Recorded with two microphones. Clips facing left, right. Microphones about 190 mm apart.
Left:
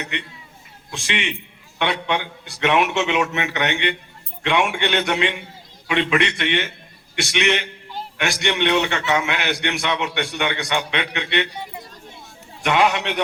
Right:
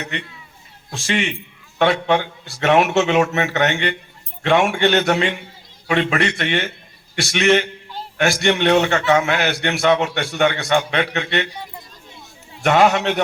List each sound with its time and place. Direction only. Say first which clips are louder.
0.9 s a man's voice: right 5 dB; 40° right (ahead or behind)
12.6 s a man's voice: right 4 dB; 40° right (ahead or behind)